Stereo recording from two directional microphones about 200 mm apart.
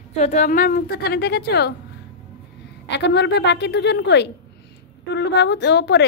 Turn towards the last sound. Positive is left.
turn(degrees=60)  # may be behind; listen again after turning